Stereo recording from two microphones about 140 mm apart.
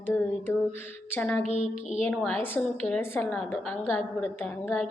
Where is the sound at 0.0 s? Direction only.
10° left (ahead or behind).